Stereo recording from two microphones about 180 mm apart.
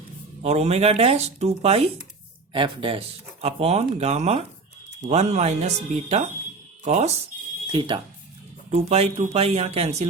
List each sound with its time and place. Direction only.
0.4 s speech: 35° right (ahead or behind)
7.7 s speech: 25° right (ahead or behind)
8.7 s speech: 35° right (ahead or behind)